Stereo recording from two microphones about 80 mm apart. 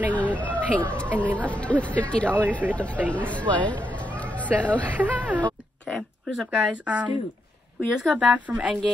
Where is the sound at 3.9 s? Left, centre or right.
Centre.